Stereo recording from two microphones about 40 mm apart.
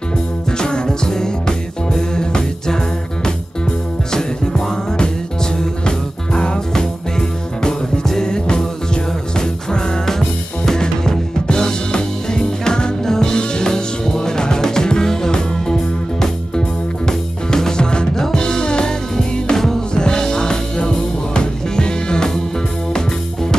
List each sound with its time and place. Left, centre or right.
0.5 s music: centre
4.1 s music: centre